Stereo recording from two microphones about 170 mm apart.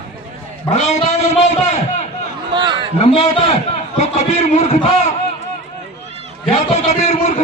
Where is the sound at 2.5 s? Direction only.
25° right (ahead or behind).